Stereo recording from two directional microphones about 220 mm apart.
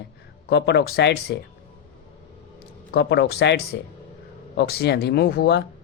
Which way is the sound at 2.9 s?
50° left (ahead or behind).